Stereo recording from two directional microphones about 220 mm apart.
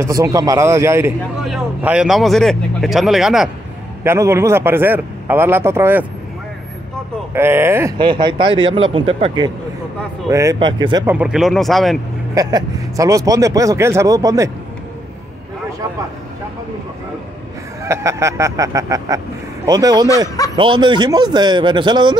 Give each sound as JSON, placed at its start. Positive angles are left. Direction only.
{"t": 0.0, "sound": "speech", "side_deg": -15}
{"t": 4.0, "sound": "speech", "side_deg": -10}
{"t": 7.3, "sound": "speech", "side_deg": -10}
{"t": 11.1, "sound": "speech", "side_deg": -5}
{"t": 12.4, "sound": "speech", "side_deg": -15}
{"t": 17.8, "sound": "speech", "side_deg": -15}